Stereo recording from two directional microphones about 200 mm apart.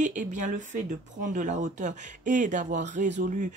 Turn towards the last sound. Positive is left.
turn(degrees=-40)  # may be behind; listen again after turning